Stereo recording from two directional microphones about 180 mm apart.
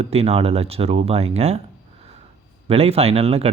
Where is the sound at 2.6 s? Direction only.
35° right (ahead or behind).